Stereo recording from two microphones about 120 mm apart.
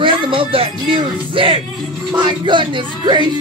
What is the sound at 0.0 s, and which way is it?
Music, 45° right (ahead or behind).